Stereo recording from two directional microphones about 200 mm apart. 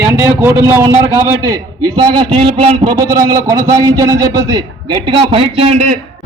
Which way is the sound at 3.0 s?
15° right (ahead or behind).